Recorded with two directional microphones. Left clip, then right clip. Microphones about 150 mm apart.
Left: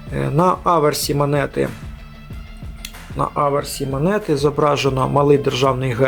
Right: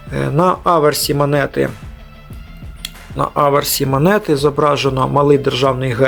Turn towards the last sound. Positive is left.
turn(degrees=-5)  # may be behind; listen again after turning